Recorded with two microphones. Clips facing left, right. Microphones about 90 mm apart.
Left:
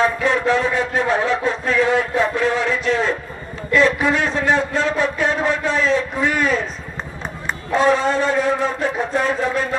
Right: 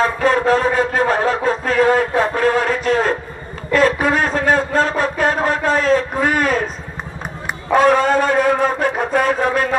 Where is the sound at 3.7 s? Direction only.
45° right (ahead or behind).